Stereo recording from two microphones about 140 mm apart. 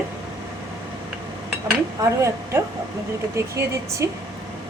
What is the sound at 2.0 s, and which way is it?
Speech, 20° right (ahead or behind).